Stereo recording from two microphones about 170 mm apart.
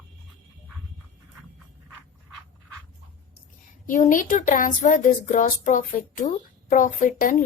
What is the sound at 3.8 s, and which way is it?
Speech, 50° left (ahead or behind).